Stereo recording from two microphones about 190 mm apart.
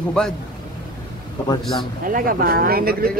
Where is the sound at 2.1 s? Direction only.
45° right (ahead or behind).